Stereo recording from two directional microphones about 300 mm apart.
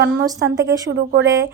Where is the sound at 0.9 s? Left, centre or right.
Right.